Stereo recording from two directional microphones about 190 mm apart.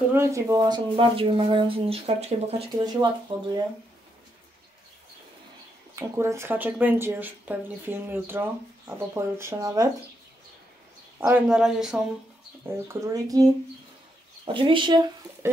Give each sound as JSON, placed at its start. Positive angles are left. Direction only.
{"t": 0.1, "sound": "speech", "side_deg": -15}
{"t": 5.9, "sound": "speech", "side_deg": -15}
{"t": 11.1, "sound": "speech", "side_deg": -10}
{"t": 12.6, "sound": "speech", "side_deg": -15}